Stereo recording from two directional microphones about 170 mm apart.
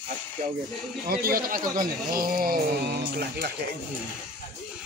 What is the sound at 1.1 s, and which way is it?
Speech, 60° right (ahead or behind).